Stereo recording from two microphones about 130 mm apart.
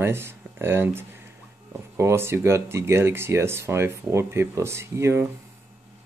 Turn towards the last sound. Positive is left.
turn(degrees=-20)  # may be behind; listen again after turning